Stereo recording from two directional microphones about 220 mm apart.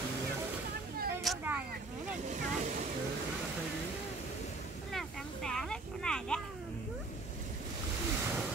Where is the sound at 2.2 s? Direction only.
35° right (ahead or behind).